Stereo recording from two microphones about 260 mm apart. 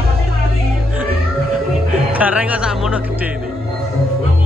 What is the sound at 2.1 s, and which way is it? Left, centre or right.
Speech, centre.